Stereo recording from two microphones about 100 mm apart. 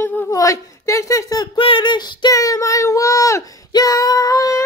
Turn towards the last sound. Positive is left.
turn(degrees=35)  # may be behind; listen again after turning